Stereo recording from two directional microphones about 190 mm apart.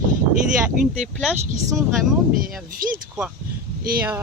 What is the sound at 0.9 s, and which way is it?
Speech, 5° right (ahead or behind).